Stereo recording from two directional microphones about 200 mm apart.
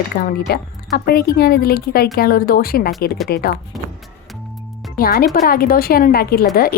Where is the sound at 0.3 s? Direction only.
50° left (ahead or behind).